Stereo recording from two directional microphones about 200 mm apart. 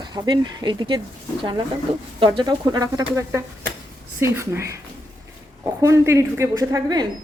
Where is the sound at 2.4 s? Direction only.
20° right (ahead or behind).